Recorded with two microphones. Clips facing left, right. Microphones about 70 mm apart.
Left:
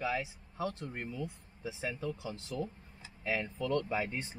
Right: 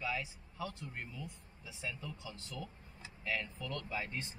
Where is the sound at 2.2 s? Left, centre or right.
Left.